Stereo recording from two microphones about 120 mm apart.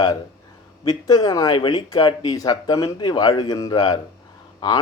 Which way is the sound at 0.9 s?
35° left (ahead or behind).